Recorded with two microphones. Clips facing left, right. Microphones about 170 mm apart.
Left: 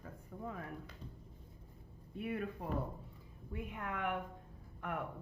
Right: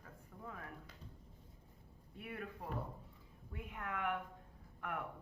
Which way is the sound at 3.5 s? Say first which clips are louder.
Left 3 dB; 20° left (ahead or behind).